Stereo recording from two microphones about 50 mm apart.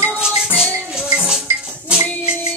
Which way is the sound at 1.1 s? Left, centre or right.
Centre.